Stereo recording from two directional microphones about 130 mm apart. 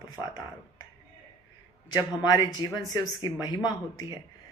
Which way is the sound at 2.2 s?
30° left (ahead or behind).